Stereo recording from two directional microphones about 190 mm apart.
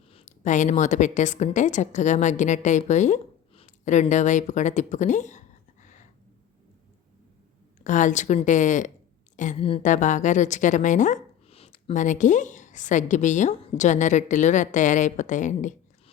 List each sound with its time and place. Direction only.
0.1 s a woman's voice: 35° left (ahead or behind)
7.9 s a woman's voice: 40° left (ahead or behind)